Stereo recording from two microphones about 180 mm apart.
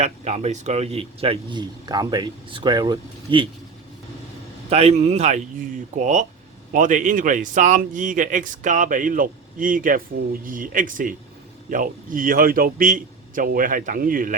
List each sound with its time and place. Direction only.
0.0 s speech: 40° right (ahead or behind)
4.7 s a man's voice: 35° right (ahead or behind)